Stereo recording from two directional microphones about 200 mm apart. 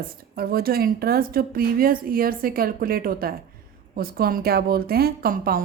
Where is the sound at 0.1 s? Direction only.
50° right (ahead or behind).